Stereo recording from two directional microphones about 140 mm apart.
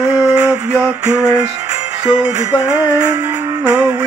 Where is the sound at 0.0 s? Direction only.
10° right (ahead or behind).